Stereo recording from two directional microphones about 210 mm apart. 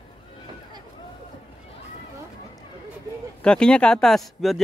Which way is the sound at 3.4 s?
5° left (ahead or behind).